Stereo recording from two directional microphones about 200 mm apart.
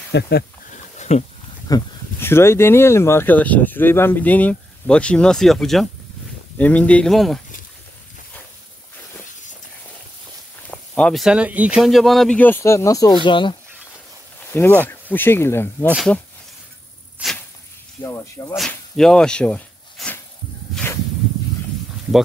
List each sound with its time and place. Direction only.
0.1 s speech: 55° left (ahead or behind)
0.9 s a sound: 35° left (ahead or behind)
1.7 s speech: 10° left (ahead or behind)
10.7 s speech: 5° left (ahead or behind); by 13.6 s 25° left (ahead or behind)
14.5 s speech: 10° left (ahead or behind)
15.9 s speech: centre (ahead or behind)
17.2 s a sound: 5° right (ahead or behind)
18.0 s speech: 15° left (ahead or behind)
18.6 s speech: 5° left (ahead or behind)
20.7 s snake: 10° left (ahead or behind)